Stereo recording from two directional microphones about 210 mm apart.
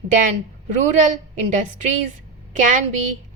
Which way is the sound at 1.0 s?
35° right (ahead or behind).